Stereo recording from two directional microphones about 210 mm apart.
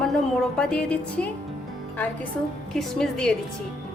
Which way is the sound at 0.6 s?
5° left (ahead or behind).